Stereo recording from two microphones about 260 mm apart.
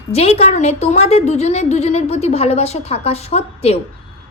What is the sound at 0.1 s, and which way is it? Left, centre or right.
Speech, left.